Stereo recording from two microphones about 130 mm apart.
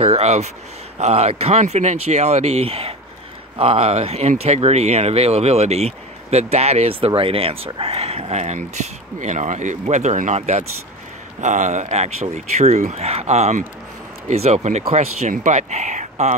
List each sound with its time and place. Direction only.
0.0 s speech: 55° right (ahead or behind)